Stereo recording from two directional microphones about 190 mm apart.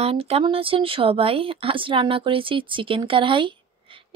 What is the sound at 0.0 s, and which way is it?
Speech, 30° right (ahead or behind).